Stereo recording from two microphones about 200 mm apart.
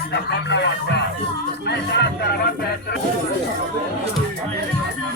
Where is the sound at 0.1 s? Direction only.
60° left (ahead or behind).